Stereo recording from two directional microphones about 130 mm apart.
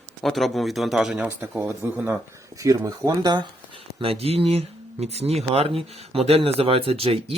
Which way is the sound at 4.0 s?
50° right (ahead or behind).